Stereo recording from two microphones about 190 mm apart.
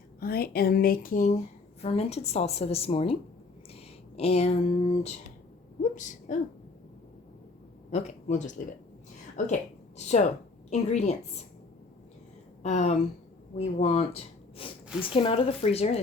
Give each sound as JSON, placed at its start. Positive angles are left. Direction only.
{"t": 0.2, "sound": "speech", "side_deg": 50}
{"t": 1.8, "sound": "a woman's voice", "side_deg": 30}
{"t": 5.8, "sound": "a woman's voice", "side_deg": 40}
{"t": 7.9, "sound": "a woman's voice", "side_deg": 35}
{"t": 12.6, "sound": "a woman's voice", "side_deg": 35}